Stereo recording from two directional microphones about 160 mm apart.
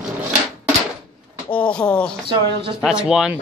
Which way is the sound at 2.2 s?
30° right (ahead or behind).